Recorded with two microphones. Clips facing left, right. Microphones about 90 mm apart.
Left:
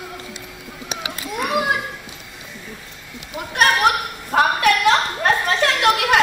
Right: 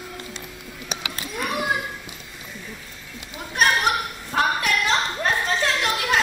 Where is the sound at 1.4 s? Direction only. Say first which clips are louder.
Left 5 dB; 20° left (ahead or behind).